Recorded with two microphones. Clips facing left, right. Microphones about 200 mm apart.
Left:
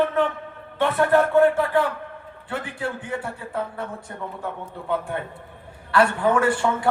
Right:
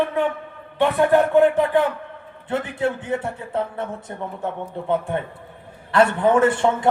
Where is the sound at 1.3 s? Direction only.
20° right (ahead or behind).